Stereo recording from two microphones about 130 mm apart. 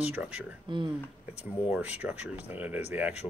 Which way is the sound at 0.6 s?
35° right (ahead or behind).